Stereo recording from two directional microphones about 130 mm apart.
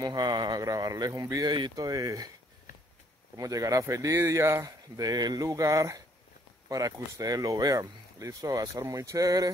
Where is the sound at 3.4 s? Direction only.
25° right (ahead or behind).